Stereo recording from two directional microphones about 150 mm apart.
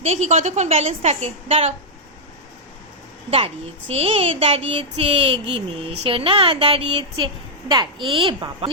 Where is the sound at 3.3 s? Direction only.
40° right (ahead or behind).